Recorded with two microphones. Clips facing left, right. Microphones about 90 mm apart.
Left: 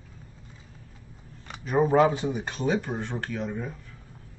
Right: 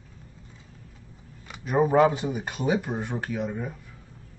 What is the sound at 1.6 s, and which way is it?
A man's voice, 5° right (ahead or behind).